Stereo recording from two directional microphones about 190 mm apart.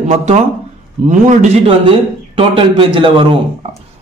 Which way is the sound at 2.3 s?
25° right (ahead or behind).